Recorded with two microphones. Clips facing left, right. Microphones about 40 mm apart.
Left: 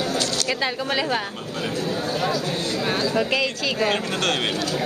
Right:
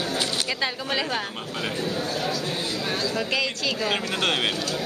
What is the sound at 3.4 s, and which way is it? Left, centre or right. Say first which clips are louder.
Speech: left 2 dB; centre.